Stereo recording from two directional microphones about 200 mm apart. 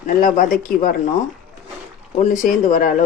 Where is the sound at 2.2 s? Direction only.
40° left (ahead or behind).